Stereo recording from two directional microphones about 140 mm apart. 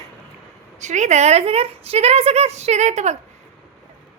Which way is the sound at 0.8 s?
55° right (ahead or behind).